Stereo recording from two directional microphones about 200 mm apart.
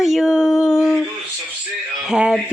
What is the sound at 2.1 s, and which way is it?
Music, 5° right (ahead or behind).